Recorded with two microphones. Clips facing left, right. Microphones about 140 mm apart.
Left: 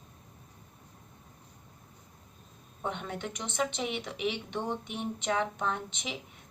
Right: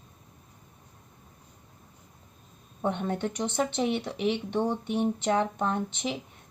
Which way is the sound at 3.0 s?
35° right (ahead or behind).